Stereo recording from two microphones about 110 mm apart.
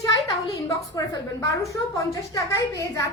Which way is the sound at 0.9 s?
30° left (ahead or behind).